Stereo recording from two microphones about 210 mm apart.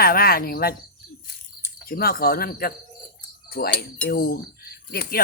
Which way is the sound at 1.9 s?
45° left (ahead or behind).